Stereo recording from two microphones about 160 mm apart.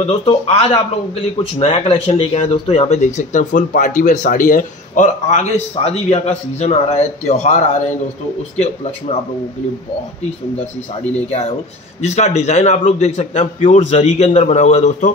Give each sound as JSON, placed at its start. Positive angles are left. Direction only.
{"t": 0.0, "sound": "speech", "side_deg": 40}
{"t": 9.1, "sound": "speech", "side_deg": 40}
{"t": 12.0, "sound": "speech", "side_deg": 45}